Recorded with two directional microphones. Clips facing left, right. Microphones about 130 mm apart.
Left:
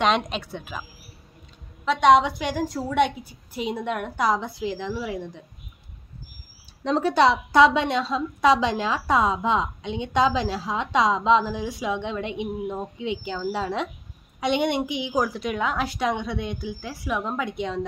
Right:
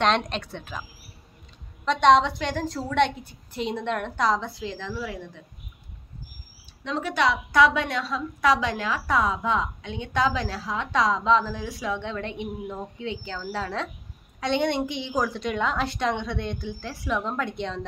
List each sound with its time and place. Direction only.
0.0 s a woman's voice: 5° left (ahead or behind)
1.9 s a woman's voice: 5° left (ahead or behind)
6.8 s a woman's voice: 35° left (ahead or behind); by 15.0 s 15° left (ahead or behind)
15.0 s a woman's voice: 5° left (ahead or behind)